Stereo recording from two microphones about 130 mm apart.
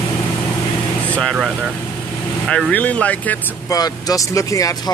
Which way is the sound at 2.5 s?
10° left (ahead or behind).